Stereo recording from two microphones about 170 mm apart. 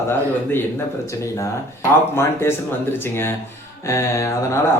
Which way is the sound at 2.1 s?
15° left (ahead or behind).